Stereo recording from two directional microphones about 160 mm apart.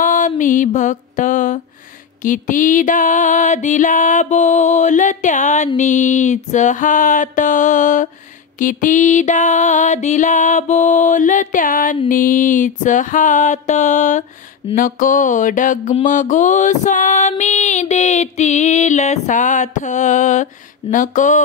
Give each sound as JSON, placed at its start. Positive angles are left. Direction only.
{"t": 0.0, "sound": "mantra", "side_deg": 55}
{"t": 2.2, "sound": "music", "side_deg": 55}
{"t": 14.8, "sound": "mantra", "side_deg": 60}
{"t": 16.0, "sound": "music", "side_deg": 50}